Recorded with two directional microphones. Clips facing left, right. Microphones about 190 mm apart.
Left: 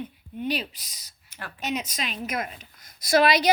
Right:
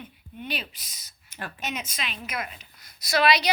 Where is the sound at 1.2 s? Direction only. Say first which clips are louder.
Right 3 dB; 20° right (ahead or behind).